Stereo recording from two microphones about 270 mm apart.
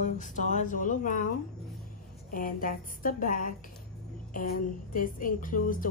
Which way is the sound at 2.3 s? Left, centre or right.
Left.